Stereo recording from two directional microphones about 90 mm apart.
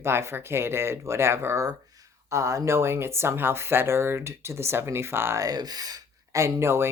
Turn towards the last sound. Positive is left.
turn(degrees=-30)  # may be behind; listen again after turning